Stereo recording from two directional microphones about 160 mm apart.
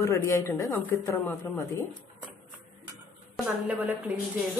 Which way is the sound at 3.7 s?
10° right (ahead or behind).